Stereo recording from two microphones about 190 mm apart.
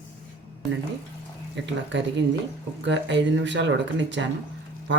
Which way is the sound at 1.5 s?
70° right (ahead or behind).